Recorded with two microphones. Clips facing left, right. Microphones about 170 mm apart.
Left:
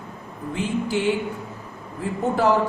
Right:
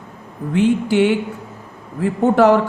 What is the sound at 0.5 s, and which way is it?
Speech, 70° right (ahead or behind).